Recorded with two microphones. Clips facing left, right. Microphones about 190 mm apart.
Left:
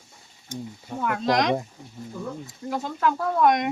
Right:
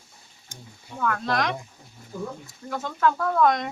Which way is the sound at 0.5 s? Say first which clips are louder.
Left 9 dB; 20° left (ahead or behind).